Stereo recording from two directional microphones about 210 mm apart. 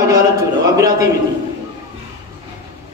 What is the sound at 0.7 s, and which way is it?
Speech, 15° right (ahead or behind).